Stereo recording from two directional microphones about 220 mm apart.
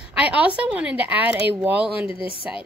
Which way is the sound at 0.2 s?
5° right (ahead or behind).